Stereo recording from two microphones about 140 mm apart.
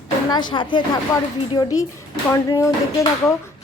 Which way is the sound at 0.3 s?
35° left (ahead or behind).